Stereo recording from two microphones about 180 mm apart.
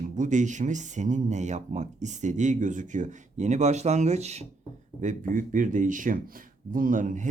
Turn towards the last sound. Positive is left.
turn(degrees=-45)  # may be behind; listen again after turning